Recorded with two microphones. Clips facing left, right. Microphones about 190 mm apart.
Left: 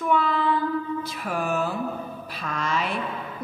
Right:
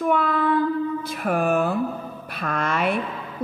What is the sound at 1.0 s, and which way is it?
A woman's voice, 55° right (ahead or behind).